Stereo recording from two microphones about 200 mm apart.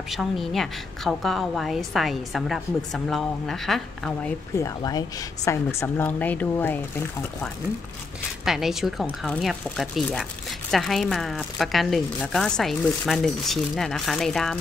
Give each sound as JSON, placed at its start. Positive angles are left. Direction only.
{"t": 0.1, "sound": "a woman's voice", "side_deg": 0}
{"t": 4.6, "sound": "speech", "side_deg": 15}
{"t": 8.5, "sound": "a woman's voice", "side_deg": 0}